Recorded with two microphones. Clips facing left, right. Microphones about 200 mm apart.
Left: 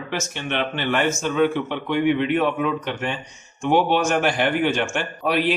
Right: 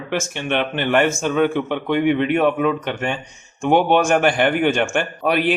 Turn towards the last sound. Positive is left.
turn(degrees=-55)  # may be behind; listen again after turning